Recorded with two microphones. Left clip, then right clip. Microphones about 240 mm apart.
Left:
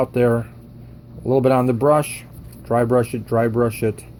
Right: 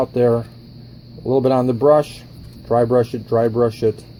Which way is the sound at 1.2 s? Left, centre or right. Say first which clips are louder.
Even; left.